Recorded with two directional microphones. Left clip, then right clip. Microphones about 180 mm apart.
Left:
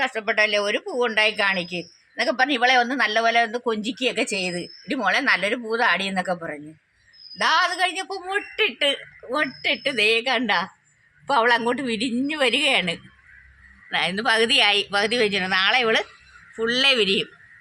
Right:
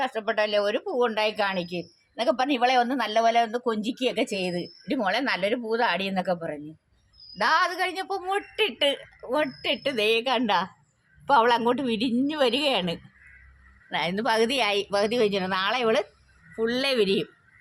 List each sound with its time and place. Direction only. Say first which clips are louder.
0.0 s a woman's voice: left 4 dB; 20° right (ahead or behind); by 17.2 s 45° right (ahead or behind)